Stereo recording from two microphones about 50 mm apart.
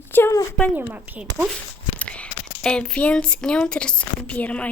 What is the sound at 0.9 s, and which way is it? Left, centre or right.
Speech, right.